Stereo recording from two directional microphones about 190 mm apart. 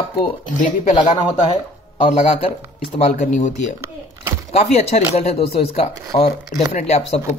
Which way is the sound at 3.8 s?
15° right (ahead or behind).